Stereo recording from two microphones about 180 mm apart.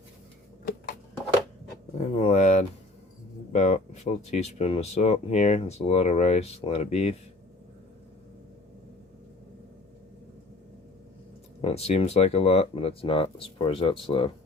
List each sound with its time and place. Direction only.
2.0 s speech: 40° left (ahead or behind)
11.6 s speech: 35° left (ahead or behind)